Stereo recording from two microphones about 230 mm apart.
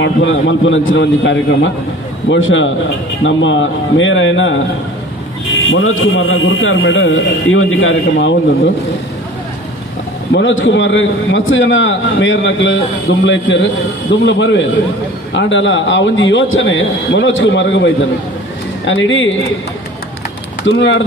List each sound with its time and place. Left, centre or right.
0.0 s a man's voice: left
5.7 s a man's voice: left
10.3 s a man's voice: left
20.6 s a man's voice: left